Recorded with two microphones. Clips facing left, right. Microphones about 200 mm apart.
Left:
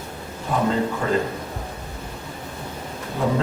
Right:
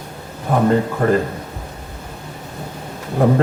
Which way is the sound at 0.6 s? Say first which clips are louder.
Right 7 dB; 55° right (ahead or behind).